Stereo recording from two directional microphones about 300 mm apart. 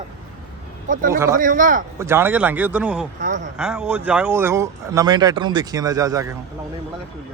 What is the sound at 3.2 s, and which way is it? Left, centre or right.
Speech, right.